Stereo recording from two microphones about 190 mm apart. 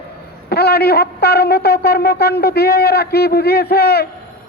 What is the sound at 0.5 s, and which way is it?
A man's voice, 55° left (ahead or behind).